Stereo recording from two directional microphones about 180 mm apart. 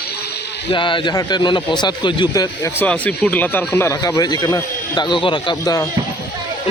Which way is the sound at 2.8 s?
5° left (ahead or behind).